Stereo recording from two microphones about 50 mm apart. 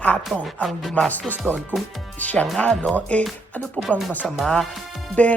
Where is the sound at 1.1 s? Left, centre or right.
Left.